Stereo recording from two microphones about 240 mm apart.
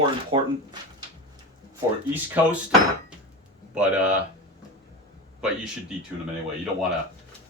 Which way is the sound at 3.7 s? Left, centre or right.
Centre.